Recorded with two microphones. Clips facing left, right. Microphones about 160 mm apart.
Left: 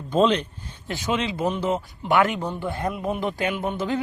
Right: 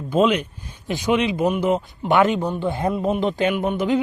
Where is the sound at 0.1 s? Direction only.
10° right (ahead or behind).